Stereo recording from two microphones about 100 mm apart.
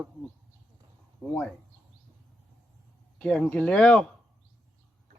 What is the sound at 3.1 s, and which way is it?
Speech, 10° left (ahead or behind).